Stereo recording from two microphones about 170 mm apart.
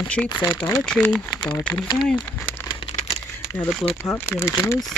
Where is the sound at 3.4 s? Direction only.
15° left (ahead or behind).